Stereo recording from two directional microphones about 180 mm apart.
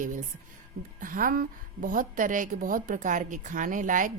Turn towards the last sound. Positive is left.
turn(degrees=-45)  # may be behind; listen again after turning